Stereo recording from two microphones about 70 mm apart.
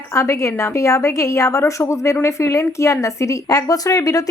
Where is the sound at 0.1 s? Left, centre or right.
Left.